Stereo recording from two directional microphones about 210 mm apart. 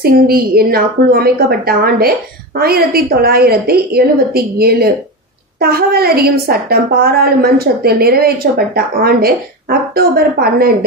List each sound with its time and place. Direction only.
0.0 s a woman's voice: 45° right (ahead or behind)